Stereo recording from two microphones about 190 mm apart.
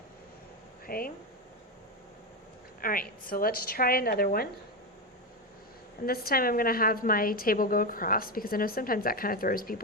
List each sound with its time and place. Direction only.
0.9 s speech: 50° left (ahead or behind)
2.8 s a woman's voice: 50° left (ahead or behind)
6.1 s a woman's voice: 50° left (ahead or behind)